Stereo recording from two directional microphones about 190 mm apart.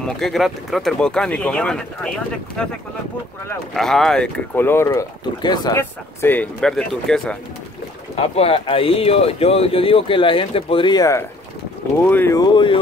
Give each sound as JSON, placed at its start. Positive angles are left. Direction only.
{"t": 0.0, "sound": "speech", "side_deg": 0}
{"t": 3.7, "sound": "speech", "side_deg": 0}
{"t": 5.8, "sound": "speech", "side_deg": 10}
{"t": 8.2, "sound": "speech", "side_deg": 30}